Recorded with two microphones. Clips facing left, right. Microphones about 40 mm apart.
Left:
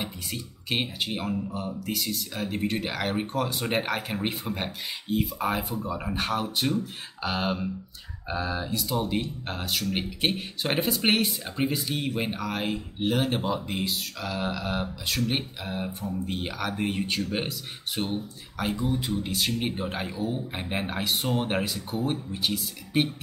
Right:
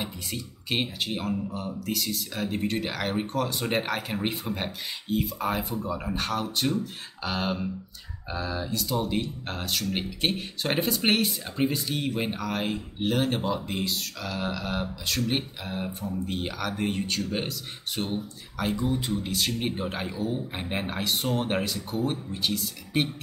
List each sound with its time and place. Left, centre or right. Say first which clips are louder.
0.0 s speech: even; centre
6.8 s beatboxing: left 1 dB; centre
8.3 s speech: left 1 dB; centre